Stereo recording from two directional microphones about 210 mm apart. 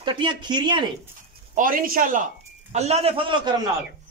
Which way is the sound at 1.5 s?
40° right (ahead or behind).